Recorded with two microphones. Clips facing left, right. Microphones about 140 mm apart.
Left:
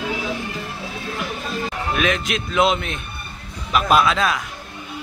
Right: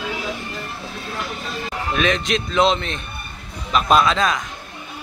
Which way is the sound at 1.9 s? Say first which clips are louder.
Right 3 dB; 5° left (ahead or behind).